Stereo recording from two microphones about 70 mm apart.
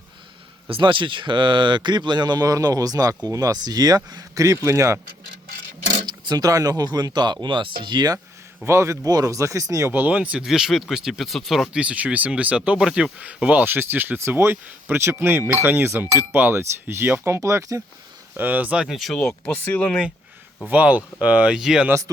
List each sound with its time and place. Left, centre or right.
1.3 s speech: right
6.1 s speech: right
8.6 s speech: right
9.0 s speech: right
9.9 s speech: right
10.2 s speech: centre
10.4 s speech: centre
11.7 s speech: centre; by 17.8 s right
18.3 s speech: right
18.9 s speech: centre
19.6 s speech: left
20.7 s speech: right